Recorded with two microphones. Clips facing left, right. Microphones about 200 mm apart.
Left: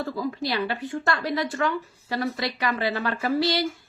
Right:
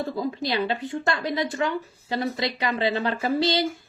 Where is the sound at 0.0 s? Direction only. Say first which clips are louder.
Right 1 dB; 20° right (ahead or behind).